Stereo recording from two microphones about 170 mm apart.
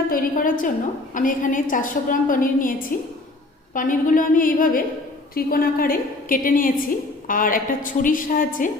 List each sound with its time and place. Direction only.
0.1 s a woman's voice: 55° left (ahead or behind)